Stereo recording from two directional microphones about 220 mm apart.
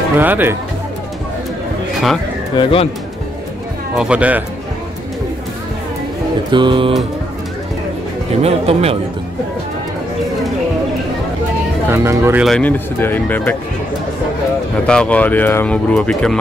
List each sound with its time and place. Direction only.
0.2 s speech: 10° right (ahead or behind)
2.5 s speech: 25° left (ahead or behind)
3.9 s speech: 5° right (ahead or behind)
6.5 s speech: 20° right (ahead or behind)
8.3 s speech: 30° right (ahead or behind)
11.9 s speech: 10° right (ahead or behind)
12.4 s speech: 5° left (ahead or behind)
14.9 s speech: 5° left (ahead or behind)